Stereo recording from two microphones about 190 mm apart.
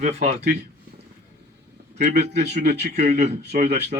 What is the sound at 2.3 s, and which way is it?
Speech, 60° right (ahead or behind).